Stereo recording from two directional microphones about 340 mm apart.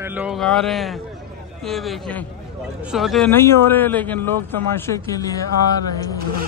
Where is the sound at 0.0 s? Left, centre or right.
Centre.